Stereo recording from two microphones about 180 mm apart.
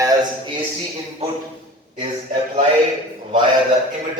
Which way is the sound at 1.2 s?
35° right (ahead or behind).